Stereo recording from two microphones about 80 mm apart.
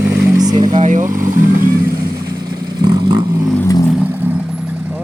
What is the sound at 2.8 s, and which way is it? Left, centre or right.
Vehicle, right.